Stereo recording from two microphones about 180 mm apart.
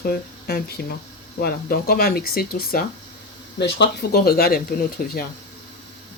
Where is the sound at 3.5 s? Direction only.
70° left (ahead or behind); by 5.3 s 55° left (ahead or behind).